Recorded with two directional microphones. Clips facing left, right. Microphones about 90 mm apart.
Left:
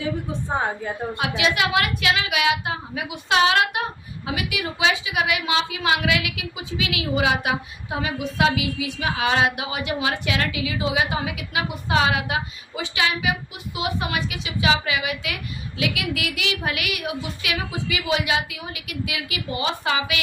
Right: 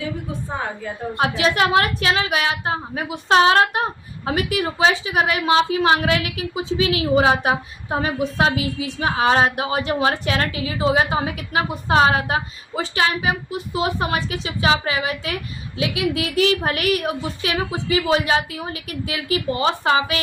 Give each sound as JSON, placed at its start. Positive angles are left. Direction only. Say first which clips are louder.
{"t": 1.1, "sound": "a woman's voice", "louder": "right 5 dB", "side_deg": -35}